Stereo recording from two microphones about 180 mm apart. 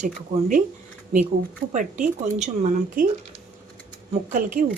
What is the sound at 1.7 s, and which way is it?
Speech, 45° right (ahead or behind).